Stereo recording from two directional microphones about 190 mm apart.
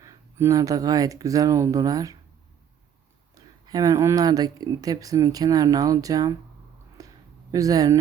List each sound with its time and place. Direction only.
0.0 s speech: 15° right (ahead or behind)
3.3 s speech: 20° right (ahead or behind)
7.0 s a sound: 20° right (ahead or behind)
7.5 s speech: 20° right (ahead or behind)